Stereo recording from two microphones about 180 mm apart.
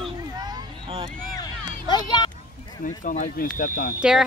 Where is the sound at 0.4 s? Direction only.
20° right (ahead or behind).